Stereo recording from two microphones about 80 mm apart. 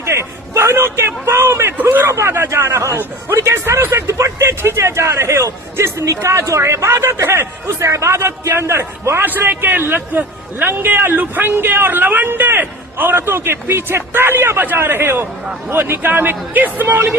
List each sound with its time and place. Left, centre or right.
0.0 s a man's voice: right
9.2 s a man's voice: right